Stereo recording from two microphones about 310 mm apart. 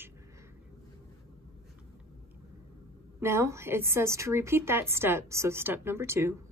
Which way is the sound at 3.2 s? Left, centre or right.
Centre.